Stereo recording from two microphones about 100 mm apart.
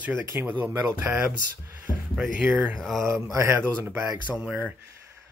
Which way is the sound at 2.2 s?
10° right (ahead or behind).